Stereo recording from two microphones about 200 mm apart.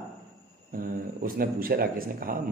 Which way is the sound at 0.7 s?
45° right (ahead or behind).